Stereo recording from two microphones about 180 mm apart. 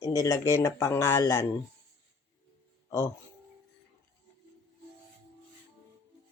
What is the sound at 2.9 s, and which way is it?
Speech, 15° left (ahead or behind).